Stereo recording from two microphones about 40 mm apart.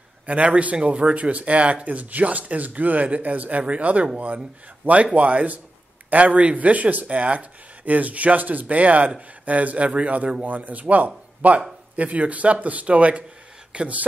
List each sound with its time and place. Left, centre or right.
0.3 s speech: right